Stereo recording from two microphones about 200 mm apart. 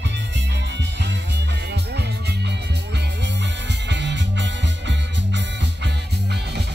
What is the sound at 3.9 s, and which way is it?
Music, 60° right (ahead or behind).